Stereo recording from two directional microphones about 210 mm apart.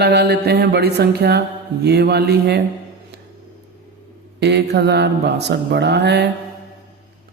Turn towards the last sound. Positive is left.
turn(degrees=-55)  # may be behind; listen again after turning